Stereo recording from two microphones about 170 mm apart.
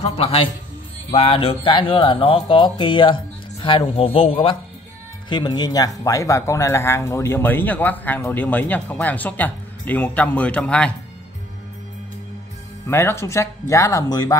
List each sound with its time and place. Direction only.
0.0 s speech: 35° left (ahead or behind); by 10.9 s 5° left (ahead or behind)
12.8 s speech: 15° left (ahead or behind)